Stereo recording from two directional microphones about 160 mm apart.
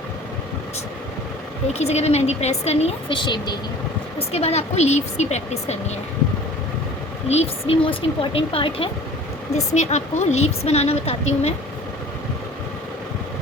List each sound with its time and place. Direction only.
1.8 s speech: 45° left (ahead or behind)
4.2 s a woman's voice: 40° left (ahead or behind)
7.3 s a woman's voice: 40° left (ahead or behind)